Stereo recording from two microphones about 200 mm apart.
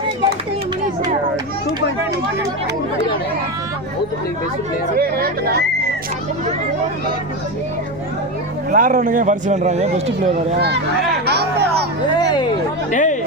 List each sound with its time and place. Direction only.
4.9 s speech: 50° right (ahead or behind)
8.7 s a man's voice: 40° right (ahead or behind)
11.3 s music: 55° right (ahead or behind)
12.9 s chatter: 40° left (ahead or behind)